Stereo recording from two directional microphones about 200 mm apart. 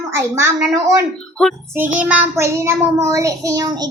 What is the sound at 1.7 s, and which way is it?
Child singing, 10° right (ahead or behind).